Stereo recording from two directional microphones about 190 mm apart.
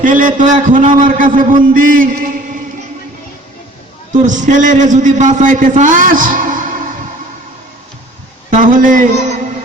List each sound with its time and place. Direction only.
0.0 s a man's voice: 45° right (ahead or behind)
4.1 s a man's voice: 40° right (ahead or behind)
8.4 s a man's voice: 45° right (ahead or behind)